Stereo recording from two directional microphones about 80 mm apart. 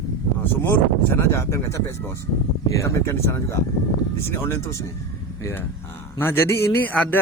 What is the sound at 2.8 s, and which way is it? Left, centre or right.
Speech, left.